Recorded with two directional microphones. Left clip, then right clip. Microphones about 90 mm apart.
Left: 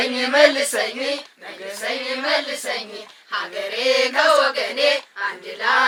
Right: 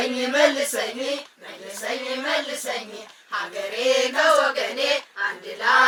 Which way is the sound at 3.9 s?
45° left (ahead or behind).